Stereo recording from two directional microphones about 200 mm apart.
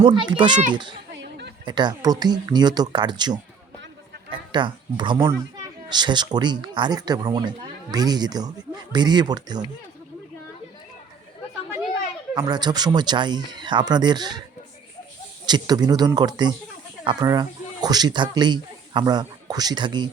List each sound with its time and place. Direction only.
0.0 s speech: 25° right (ahead or behind)
1.1 s a sound: 55° right (ahead or behind)
1.6 s speech: 20° right (ahead or behind)
12.3 s speech: 20° right (ahead or behind)
15.4 s speech: 20° right (ahead or behind)